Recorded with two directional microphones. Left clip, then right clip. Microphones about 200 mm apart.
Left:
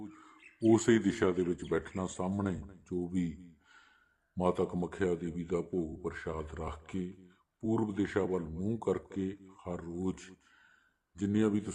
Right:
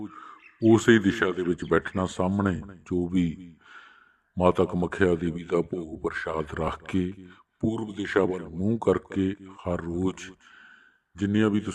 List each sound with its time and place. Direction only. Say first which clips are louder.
0.0 s a man's voice: right 9 dB; 20° right (ahead or behind); by 7.7 s 40° right (ahead or behind)
7.7 s speech: left 1 dB; 5° right (ahead or behind)
8.0 s a man's voice: right 8 dB; 35° right (ahead or behind)